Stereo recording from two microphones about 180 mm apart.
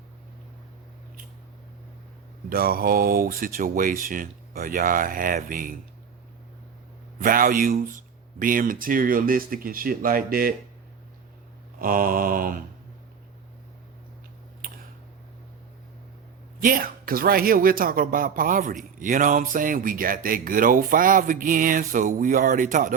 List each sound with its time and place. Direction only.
2.5 s a man's voice: 55° right (ahead or behind)
7.2 s a man's voice: 50° right (ahead or behind)
11.8 s a man's voice: 50° right (ahead or behind)
16.6 s a man's voice: 50° right (ahead or behind)